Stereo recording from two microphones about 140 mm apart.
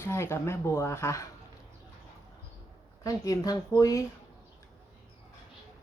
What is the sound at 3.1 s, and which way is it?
Speech, 25° left (ahead or behind).